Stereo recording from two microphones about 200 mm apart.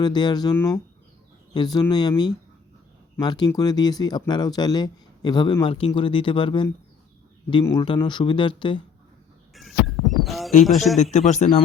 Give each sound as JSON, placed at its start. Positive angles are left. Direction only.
{"t": 0.0, "sound": "speech", "side_deg": 20}
{"t": 9.6, "sound": "a sound", "side_deg": 0}
{"t": 10.7, "sound": "speech", "side_deg": 0}
{"t": 10.9, "sound": "speech", "side_deg": 35}